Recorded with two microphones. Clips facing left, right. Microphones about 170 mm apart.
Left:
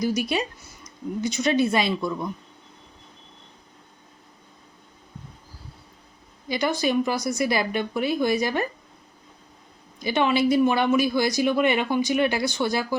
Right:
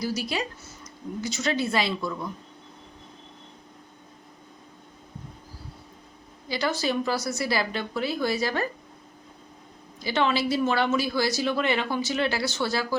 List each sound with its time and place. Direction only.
0.0 s speech: 20° left (ahead or behind)
6.5 s speech: 15° left (ahead or behind)
10.0 s speech: 15° left (ahead or behind)